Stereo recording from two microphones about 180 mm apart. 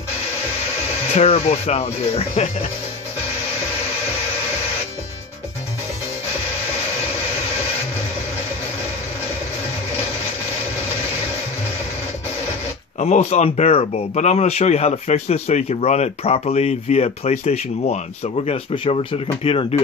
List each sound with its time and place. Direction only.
1.1 s speech: 35° left (ahead or behind)
13.0 s speech: 35° left (ahead or behind)